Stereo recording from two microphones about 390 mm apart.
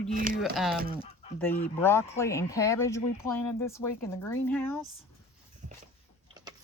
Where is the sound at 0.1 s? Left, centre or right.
Right.